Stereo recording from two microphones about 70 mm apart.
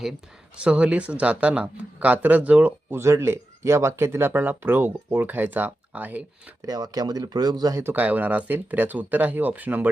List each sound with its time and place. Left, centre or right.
0.5 s speech: centre
2.9 s speech: right
6.7 s speech: right
7.9 s speech: right